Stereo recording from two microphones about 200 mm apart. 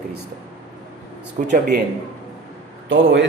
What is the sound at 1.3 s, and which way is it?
Speech, 40° right (ahead or behind).